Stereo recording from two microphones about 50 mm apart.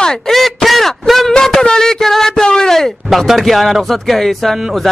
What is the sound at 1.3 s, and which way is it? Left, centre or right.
A man's voice, centre.